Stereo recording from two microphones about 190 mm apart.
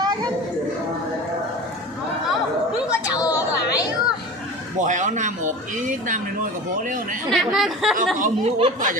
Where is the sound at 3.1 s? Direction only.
20° left (ahead or behind).